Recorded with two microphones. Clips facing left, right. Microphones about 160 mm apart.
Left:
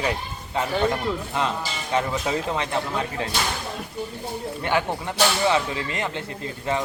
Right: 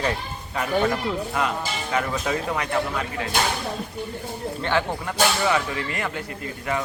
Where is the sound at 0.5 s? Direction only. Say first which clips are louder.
Even; 25° left (ahead or behind).